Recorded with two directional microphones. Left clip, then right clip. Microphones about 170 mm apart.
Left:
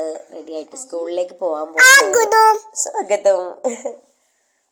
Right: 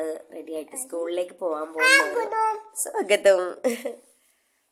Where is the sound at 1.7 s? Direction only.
70° left (ahead or behind).